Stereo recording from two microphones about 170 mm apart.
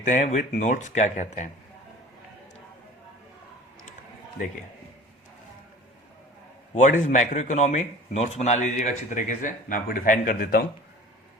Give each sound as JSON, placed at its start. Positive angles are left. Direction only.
{"t": 0.1, "sound": "a man's voice", "side_deg": 45}
{"t": 6.7, "sound": "a man's voice", "side_deg": 45}